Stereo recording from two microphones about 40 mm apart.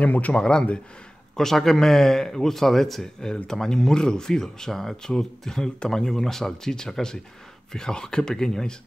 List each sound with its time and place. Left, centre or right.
0.0 s a man's voice: left
0.3 s a man's voice: left
1.3 s speech: centre